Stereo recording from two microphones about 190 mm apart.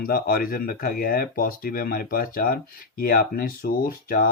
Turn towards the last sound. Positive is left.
turn(degrees=50)  # may be behind; listen again after turning